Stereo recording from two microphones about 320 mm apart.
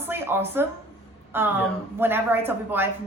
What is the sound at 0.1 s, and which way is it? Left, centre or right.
A woman's voice, centre.